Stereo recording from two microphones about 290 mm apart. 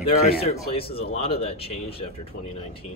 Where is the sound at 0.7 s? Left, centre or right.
Centre.